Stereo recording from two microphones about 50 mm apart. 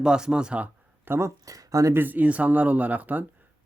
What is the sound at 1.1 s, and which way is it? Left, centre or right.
Speech, right.